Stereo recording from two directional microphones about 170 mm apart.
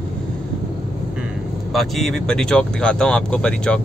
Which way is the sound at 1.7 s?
Centre (ahead or behind).